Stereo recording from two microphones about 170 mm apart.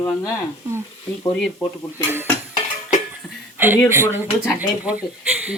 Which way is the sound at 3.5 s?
10° right (ahead or behind).